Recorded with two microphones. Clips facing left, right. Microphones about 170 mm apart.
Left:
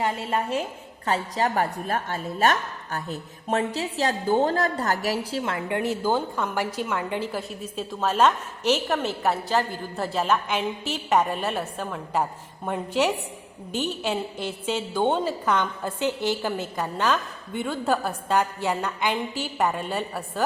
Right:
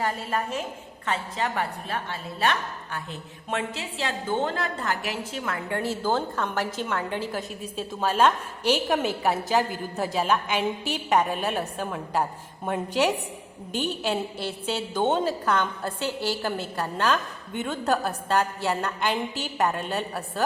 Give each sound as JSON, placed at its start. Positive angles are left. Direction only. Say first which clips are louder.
{"t": 0.0, "sound": "a woman's voice", "louder": "left 2 dB", "side_deg": 25}
{"t": 1.0, "sound": "a woman's voice", "louder": "left 4 dB", "side_deg": 40}
{"t": 8.0, "sound": "a woman's voice", "louder": "left 1 dB", "side_deg": -10}
{"t": 13.8, "sound": "a woman's voice", "louder": "right 1 dB", "side_deg": -10}
{"t": 15.0, "sound": "a woman's voice", "louder": "even", "side_deg": 10}